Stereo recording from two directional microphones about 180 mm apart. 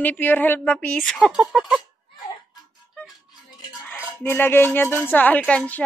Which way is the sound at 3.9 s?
10° left (ahead or behind).